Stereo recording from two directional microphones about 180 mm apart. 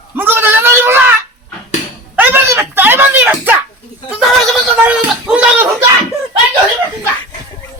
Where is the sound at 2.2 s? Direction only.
10° right (ahead or behind).